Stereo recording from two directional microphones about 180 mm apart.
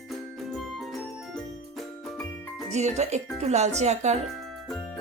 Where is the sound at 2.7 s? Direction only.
40° right (ahead or behind).